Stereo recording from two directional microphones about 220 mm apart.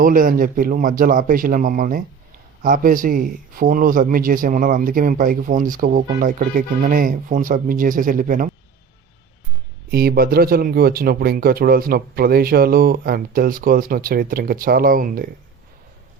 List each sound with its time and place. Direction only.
0.0 s speech: 40° right (ahead or behind)
9.9 s speech: 45° right (ahead or behind)